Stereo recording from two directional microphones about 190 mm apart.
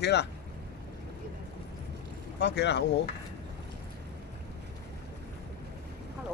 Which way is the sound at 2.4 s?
65° left (ahead or behind).